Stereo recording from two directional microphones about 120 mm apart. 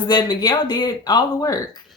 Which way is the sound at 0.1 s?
35° left (ahead or behind).